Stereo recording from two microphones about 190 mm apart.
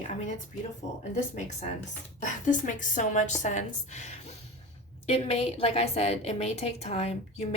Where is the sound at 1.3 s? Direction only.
40° left (ahead or behind).